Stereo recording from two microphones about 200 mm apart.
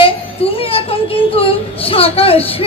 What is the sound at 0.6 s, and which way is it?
A woman's voice, 30° left (ahead or behind).